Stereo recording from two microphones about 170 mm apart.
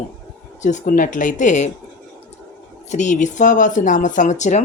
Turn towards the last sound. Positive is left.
turn(degrees=45)  # may be behind; listen again after turning